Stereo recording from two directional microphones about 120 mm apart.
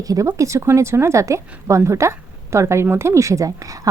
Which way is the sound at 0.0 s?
30° right (ahead or behind).